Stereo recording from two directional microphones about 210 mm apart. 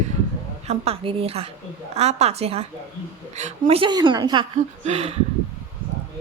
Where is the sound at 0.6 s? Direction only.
30° right (ahead or behind).